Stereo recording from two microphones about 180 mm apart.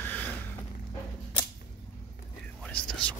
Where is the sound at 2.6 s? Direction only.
5° left (ahead or behind).